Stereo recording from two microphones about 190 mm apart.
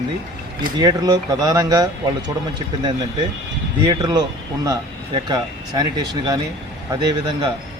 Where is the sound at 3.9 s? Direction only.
20° right (ahead or behind).